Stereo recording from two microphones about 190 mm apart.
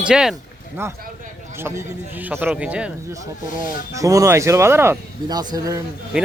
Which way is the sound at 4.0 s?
15° right (ahead or behind).